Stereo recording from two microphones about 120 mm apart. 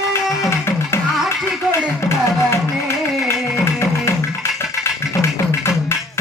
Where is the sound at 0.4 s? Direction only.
20° left (ahead or behind).